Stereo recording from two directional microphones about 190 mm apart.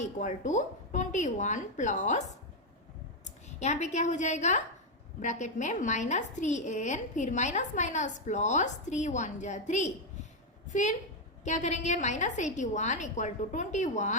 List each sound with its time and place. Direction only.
0.0 s a woman's voice: 40° left (ahead or behind)
3.2 s a woman's voice: 40° left (ahead or behind)